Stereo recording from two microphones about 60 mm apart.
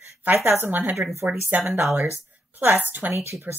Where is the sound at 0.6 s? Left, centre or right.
Right.